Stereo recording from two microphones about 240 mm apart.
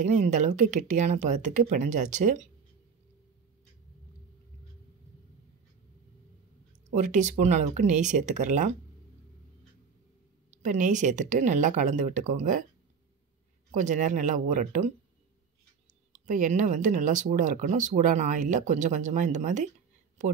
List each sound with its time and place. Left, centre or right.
0.0 s speech: right
6.9 s speech: right
10.6 s speech: right
13.7 s speech: right
16.3 s speech: right